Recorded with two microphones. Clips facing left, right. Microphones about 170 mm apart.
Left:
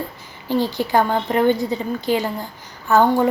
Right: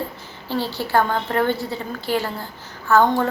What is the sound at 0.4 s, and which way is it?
A woman's voice, 15° left (ahead or behind).